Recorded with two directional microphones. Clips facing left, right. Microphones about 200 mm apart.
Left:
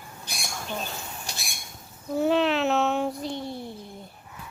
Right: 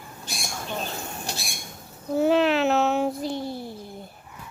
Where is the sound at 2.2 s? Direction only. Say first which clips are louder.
Right 2 dB; centre (ahead or behind).